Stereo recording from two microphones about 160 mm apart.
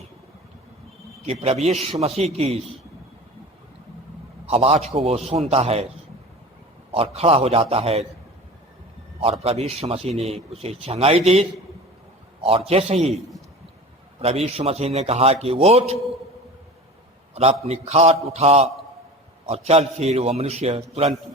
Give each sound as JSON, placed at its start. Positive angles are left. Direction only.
{"t": 1.2, "sound": "a man's voice", "side_deg": -40}
{"t": 4.4, "sound": "a man's voice", "side_deg": -35}
{"t": 6.9, "sound": "a man's voice", "side_deg": -40}
{"t": 9.4, "sound": "a man's voice", "side_deg": -40}
{"t": 14.2, "sound": "a man's voice", "side_deg": -40}
{"t": 17.3, "sound": "a man's voice", "side_deg": -40}